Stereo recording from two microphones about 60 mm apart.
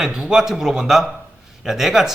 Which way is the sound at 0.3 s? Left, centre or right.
Centre.